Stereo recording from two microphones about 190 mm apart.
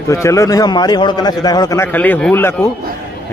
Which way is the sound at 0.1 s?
15° left (ahead or behind).